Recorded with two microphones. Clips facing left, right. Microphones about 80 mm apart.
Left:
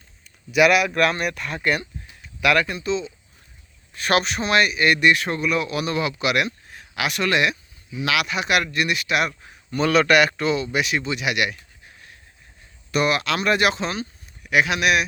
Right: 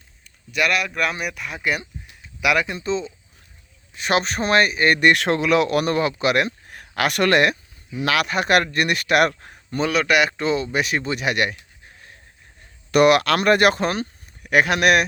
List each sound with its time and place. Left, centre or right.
0.5 s speech: centre
2.2 s a sound: centre
2.7 s speech: right
3.9 s speech: centre
4.2 s speech: right
5.0 s speech: right
5.7 s speech: right
6.0 s speech: right
6.7 s speech: right
10.1 s speech: centre; by 11.5 s right
12.9 s speech: right